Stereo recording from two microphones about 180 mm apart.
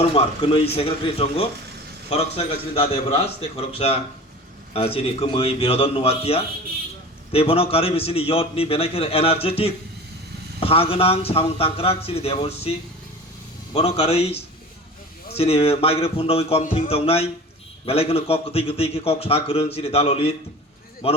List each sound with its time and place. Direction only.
0.0 s a man's voice: 30° left (ahead or behind)
13.7 s a man's voice: 35° left (ahead or behind)